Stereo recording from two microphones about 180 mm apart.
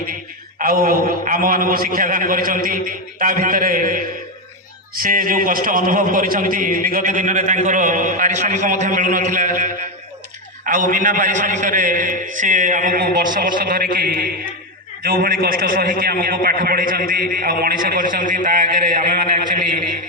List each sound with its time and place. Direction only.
0.6 s a man's voice: 55° right (ahead or behind)